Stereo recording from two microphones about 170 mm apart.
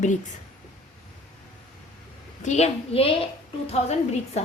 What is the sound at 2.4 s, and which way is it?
A woman's voice, 40° left (ahead or behind).